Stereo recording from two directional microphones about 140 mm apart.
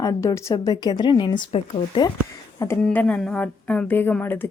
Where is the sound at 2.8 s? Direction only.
10° left (ahead or behind).